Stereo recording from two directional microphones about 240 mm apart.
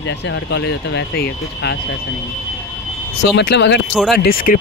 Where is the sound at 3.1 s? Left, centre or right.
Left.